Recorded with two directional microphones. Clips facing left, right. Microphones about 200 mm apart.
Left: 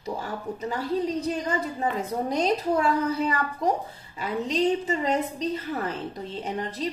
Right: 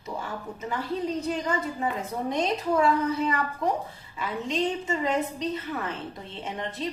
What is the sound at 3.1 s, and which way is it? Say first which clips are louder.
A woman's voice: left 1 dB; 40° left (ahead or behind).